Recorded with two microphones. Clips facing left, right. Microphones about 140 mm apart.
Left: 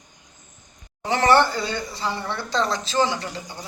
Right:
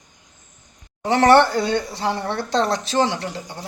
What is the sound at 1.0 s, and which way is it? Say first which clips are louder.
Speech: right 4 dB; 55° right (ahead or behind).